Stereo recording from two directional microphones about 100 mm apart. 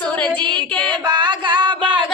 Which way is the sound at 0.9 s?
50° right (ahead or behind).